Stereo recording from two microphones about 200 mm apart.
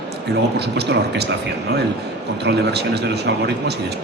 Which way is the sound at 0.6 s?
55° right (ahead or behind).